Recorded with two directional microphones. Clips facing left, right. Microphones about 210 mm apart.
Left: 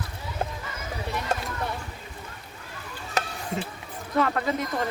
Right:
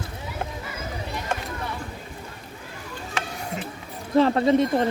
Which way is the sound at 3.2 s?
40° left (ahead or behind).